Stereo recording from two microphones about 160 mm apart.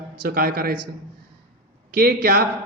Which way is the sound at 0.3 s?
65° right (ahead or behind).